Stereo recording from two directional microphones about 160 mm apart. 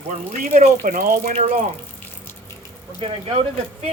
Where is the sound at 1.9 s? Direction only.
10° left (ahead or behind).